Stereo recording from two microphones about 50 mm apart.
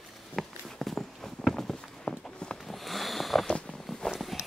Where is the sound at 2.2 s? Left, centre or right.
Centre.